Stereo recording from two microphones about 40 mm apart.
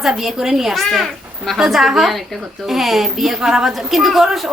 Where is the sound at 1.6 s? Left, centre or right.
Centre.